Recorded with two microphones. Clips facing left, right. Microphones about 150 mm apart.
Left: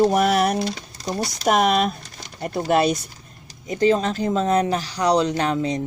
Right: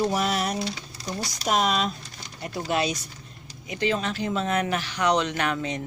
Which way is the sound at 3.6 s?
40° left (ahead or behind).